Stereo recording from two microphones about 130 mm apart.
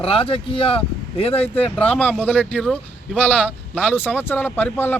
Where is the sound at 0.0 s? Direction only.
45° left (ahead or behind).